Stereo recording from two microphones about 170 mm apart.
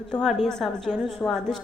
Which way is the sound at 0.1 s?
Centre (ahead or behind).